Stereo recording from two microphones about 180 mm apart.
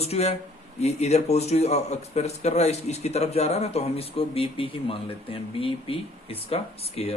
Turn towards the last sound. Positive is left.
turn(degrees=35)  # may be behind; listen again after turning